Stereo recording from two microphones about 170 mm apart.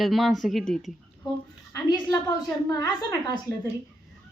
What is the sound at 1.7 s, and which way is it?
A woman's voice, 20° left (ahead or behind).